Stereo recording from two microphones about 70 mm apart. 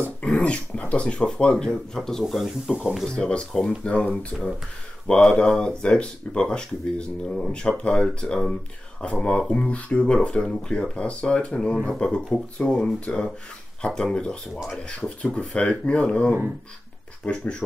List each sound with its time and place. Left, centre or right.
0.2 s speech: centre
3.1 s speech: centre
14.5 s speech: centre
15.0 s speech: centre